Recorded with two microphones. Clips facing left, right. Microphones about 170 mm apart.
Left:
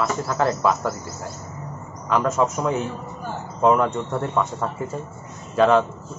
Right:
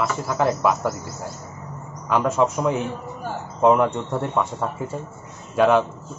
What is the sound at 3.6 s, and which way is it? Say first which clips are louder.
A man's voice: right 1 dB; 15° right (ahead or behind).